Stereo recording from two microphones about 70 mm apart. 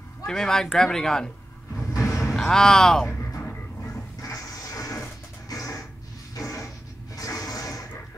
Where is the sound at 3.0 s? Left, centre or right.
Left.